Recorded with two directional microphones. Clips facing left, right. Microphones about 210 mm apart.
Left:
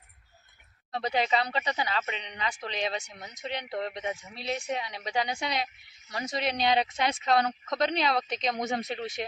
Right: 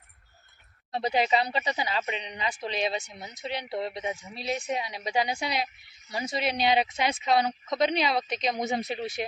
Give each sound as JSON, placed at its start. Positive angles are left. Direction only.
{"t": 0.9, "sound": "speech", "side_deg": -10}